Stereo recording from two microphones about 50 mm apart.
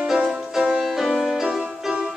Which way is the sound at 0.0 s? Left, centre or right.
Centre.